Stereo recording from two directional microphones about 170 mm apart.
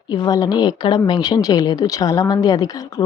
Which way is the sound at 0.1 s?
25° left (ahead or behind).